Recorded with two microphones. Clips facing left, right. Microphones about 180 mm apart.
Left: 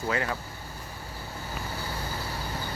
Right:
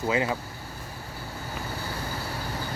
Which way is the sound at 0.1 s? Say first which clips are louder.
Right 4 dB; 20° right (ahead or behind).